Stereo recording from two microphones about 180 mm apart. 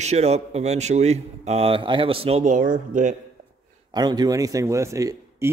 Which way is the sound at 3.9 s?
25° right (ahead or behind).